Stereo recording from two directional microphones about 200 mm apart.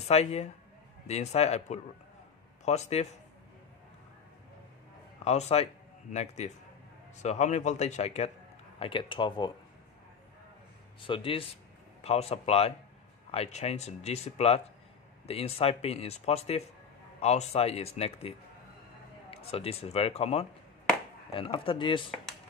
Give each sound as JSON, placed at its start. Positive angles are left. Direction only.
{"t": 0.0, "sound": "a man's voice", "side_deg": 30}
{"t": 5.2, "sound": "speech", "side_deg": 30}
{"t": 11.0, "sound": "speech", "side_deg": 25}
{"t": 19.3, "sound": "speech", "side_deg": 30}